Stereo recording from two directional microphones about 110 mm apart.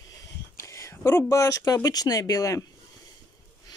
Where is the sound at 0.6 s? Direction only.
25° left (ahead or behind).